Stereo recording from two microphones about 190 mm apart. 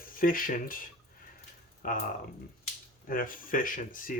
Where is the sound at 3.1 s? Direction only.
45° left (ahead or behind).